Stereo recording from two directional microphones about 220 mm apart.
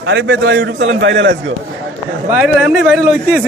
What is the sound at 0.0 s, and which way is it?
A man's voice, 50° right (ahead or behind).